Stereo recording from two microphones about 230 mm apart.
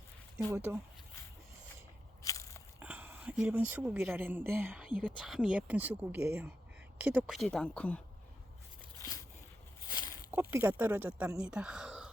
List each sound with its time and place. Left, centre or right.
0.7 s speech: centre
2.2 s crushing: centre
2.8 s speech: centre
9.0 s a sound: centre
10.3 s speech: centre